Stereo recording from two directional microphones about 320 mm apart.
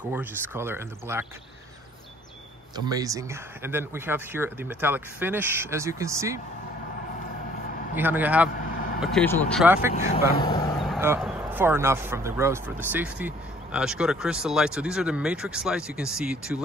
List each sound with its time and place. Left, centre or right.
0.1 s speech: centre
2.7 s speech: centre
7.9 s speech: centre
9.9 s speech: left
10.8 s speech: centre